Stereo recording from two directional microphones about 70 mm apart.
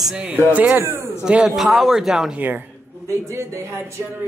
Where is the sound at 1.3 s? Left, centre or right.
Centre.